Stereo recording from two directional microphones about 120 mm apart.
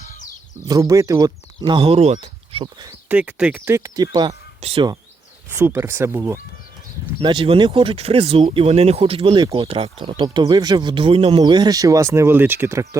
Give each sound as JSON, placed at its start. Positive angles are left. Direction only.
{"t": 0.7, "sound": "speech", "side_deg": -25}
{"t": 1.9, "sound": "speech", "side_deg": -60}
{"t": 2.2, "sound": "a sound", "side_deg": -50}
{"t": 3.1, "sound": "speech", "side_deg": -10}
{"t": 3.7, "sound": "speech", "side_deg": -25}
{"t": 4.6, "sound": "speech", "side_deg": -60}
{"t": 5.5, "sound": "speech", "side_deg": -20}
{"t": 7.2, "sound": "speech", "side_deg": -45}
{"t": 10.2, "sound": "speech", "side_deg": -35}
{"t": 11.4, "sound": "speech", "side_deg": -35}